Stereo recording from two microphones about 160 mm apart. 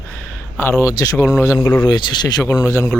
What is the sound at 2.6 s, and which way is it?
Speech, 15° left (ahead or behind).